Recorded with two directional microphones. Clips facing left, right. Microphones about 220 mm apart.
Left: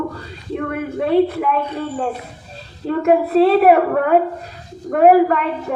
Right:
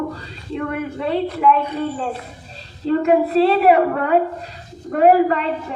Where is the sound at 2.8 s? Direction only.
50° left (ahead or behind).